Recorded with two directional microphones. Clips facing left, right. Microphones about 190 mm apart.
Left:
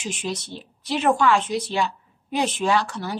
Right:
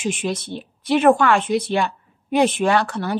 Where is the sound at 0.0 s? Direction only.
55° right (ahead or behind).